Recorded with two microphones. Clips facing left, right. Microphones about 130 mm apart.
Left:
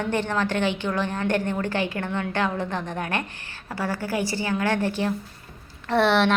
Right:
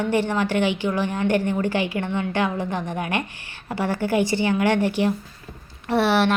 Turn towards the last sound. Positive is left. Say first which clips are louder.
# right 1 dB
turn(degrees=-5)  # may be behind; listen again after turning